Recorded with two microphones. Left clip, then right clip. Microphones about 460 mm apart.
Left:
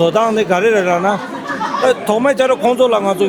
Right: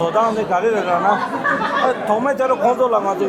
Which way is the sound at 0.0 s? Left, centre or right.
Left.